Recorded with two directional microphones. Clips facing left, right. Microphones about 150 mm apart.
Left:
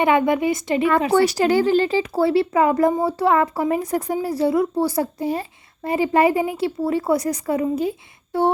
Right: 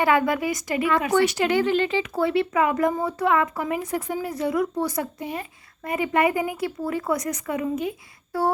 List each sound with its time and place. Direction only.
0.0 s speech: 20° left (ahead or behind)